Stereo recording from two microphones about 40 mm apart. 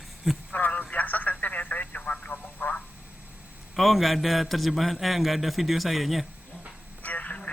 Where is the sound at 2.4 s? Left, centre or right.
Left.